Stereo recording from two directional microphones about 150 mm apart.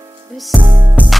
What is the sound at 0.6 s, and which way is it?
Music, 30° right (ahead or behind).